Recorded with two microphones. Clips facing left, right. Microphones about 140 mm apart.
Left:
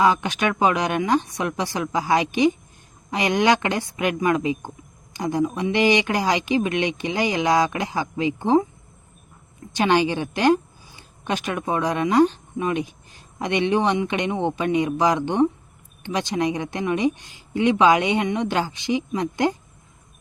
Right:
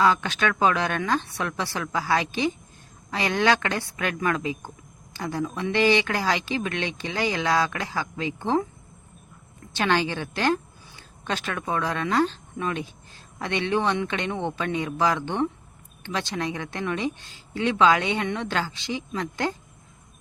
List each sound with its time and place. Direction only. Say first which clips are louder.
0.0 s speech: left 2 dB; 15° left (ahead or behind)
9.7 s a woman's voice: left 5 dB; 15° left (ahead or behind)